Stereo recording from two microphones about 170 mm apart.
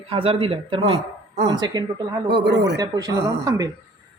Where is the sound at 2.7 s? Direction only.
20° right (ahead or behind).